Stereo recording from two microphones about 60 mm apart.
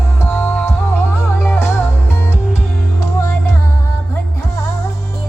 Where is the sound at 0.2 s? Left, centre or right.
Left.